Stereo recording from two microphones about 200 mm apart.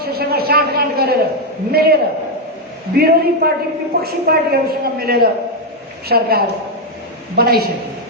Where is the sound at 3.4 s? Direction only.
50° right (ahead or behind).